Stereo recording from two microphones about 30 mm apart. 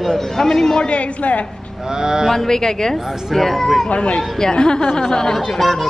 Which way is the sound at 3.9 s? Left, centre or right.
Left.